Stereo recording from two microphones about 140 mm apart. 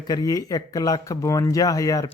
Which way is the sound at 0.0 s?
25° left (ahead or behind).